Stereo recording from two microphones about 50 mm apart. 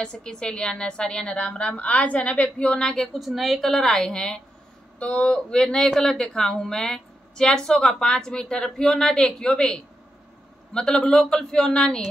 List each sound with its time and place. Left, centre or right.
0.0 s a woman's voice: centre
3.2 s speech: centre
4.9 s speech: left